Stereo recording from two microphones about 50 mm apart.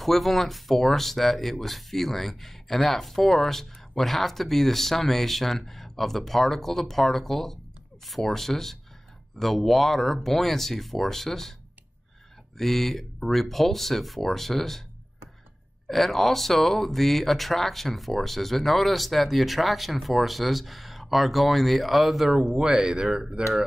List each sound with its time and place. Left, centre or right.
0.0 s speech: centre
12.5 s speech: centre
15.9 s speech: centre
22.6 s speech: centre